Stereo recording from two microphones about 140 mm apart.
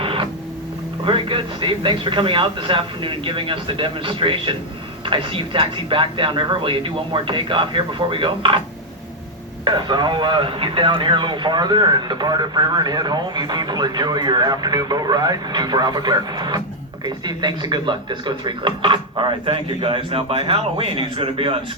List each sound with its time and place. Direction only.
0.0 s printer: 40° right (ahead or behind)
1.0 s speech: 35° right (ahead or behind)
9.6 s speech: 35° right (ahead or behind)